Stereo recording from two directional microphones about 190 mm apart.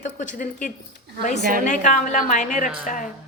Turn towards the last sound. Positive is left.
turn(degrees=45)  # may be behind; listen again after turning